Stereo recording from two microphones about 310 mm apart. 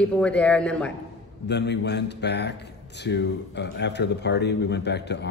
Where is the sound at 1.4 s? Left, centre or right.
Left.